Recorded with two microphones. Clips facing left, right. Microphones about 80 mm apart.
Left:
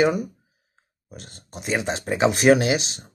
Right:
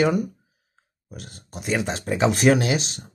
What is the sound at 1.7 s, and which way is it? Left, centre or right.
Speech, centre.